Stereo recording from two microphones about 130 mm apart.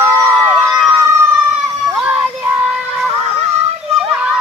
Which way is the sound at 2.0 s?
10° right (ahead or behind).